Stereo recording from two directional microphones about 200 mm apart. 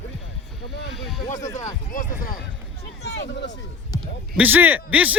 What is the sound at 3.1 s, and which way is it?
Speech, 60° left (ahead or behind).